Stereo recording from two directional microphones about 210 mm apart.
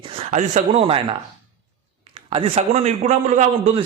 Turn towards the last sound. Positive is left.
turn(degrees=-30)  # may be behind; listen again after turning